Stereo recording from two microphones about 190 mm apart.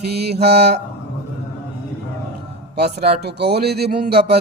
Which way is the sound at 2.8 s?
60° right (ahead or behind).